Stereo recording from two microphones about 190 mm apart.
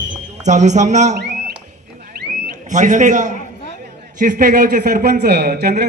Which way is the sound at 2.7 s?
40° right (ahead or behind).